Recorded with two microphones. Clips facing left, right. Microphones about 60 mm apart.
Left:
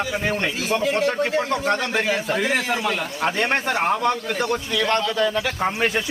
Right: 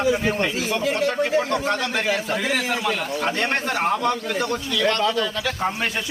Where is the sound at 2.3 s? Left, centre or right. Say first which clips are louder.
Left 2 dB; centre.